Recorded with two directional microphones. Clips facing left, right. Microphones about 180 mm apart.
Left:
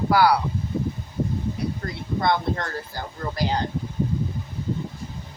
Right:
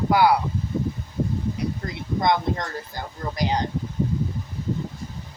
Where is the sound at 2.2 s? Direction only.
15° right (ahead or behind).